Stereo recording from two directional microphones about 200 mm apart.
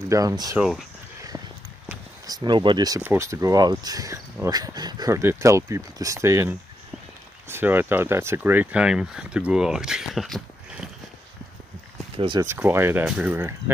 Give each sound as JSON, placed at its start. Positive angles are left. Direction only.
{"t": 0.1, "sound": "speech", "side_deg": -15}
{"t": 0.6, "sound": "speech", "side_deg": 0}
{"t": 2.2, "sound": "speech", "side_deg": -20}
{"t": 12.2, "sound": "speech", "side_deg": -25}
{"t": 12.4, "sound": "speech", "side_deg": -10}